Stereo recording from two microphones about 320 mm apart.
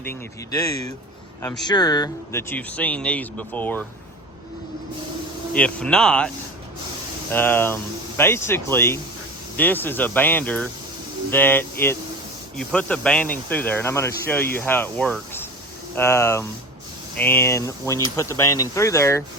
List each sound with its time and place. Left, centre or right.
0.0 s speech: centre
5.5 s speech: centre